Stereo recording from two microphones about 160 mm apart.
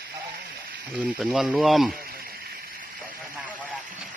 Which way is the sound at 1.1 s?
Centre (ahead or behind).